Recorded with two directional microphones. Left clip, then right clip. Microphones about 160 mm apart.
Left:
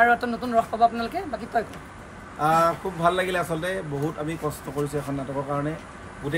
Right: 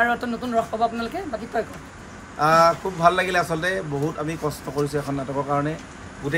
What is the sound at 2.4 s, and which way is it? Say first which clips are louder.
A man's voice: right 4 dB; 15° right (ahead or behind).